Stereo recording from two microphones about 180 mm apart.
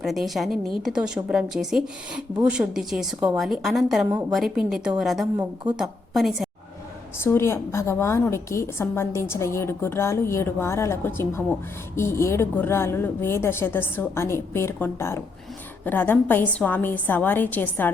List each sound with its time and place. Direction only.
0.0 s a woman's voice: centre (ahead or behind)
7.2 s a woman's voice: 15° left (ahead or behind)